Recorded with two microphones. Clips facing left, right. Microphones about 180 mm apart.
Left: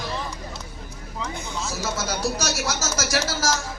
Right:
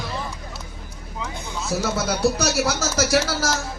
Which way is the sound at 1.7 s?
60° right (ahead or behind).